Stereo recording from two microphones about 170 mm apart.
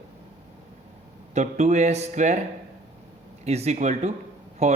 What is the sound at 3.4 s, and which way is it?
Speech, 40° right (ahead or behind).